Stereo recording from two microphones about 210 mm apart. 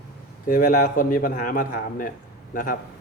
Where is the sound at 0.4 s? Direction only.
40° left (ahead or behind).